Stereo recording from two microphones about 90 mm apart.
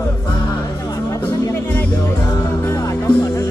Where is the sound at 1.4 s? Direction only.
25° left (ahead or behind).